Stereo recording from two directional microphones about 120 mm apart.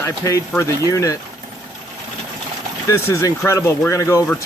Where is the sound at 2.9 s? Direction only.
25° left (ahead or behind).